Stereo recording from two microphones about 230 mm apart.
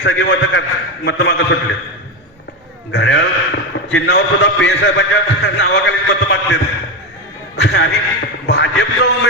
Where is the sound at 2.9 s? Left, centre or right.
Left.